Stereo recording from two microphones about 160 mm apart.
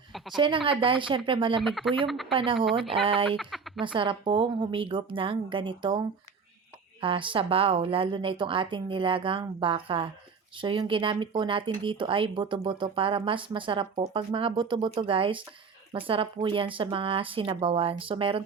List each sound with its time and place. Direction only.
0.3 s speech: 30° right (ahead or behind)
1.6 s speech: centre (ahead or behind)
2.3 s speech: 35° right (ahead or behind)